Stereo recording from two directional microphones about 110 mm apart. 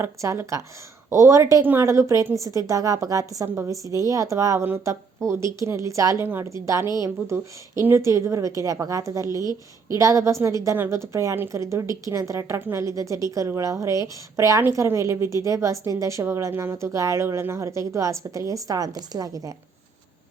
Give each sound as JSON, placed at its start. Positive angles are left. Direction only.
{"t": 0.0, "sound": "a woman's voice", "side_deg": -25}